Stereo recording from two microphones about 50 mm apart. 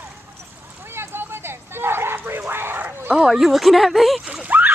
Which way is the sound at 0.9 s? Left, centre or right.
Right.